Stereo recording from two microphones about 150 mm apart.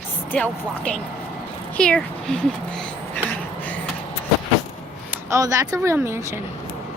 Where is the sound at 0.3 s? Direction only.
5° left (ahead or behind).